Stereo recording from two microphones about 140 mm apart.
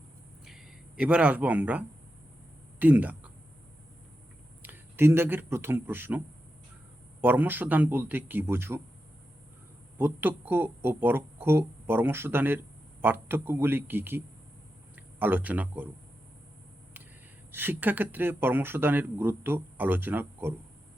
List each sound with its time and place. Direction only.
0.4 s a sound: 5° right (ahead or behind)
4.6 s speech: 15° right (ahead or behind)
10.0 s speech: 15° right (ahead or behind)
17.5 s speech: 15° right (ahead or behind)